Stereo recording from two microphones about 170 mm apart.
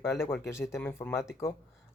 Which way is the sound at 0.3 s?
5° left (ahead or behind).